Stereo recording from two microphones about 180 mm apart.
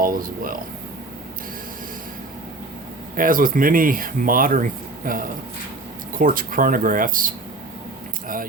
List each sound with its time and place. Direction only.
0.0 s speech: 50° right (ahead or behind)
3.2 s speech: 50° right (ahead or behind)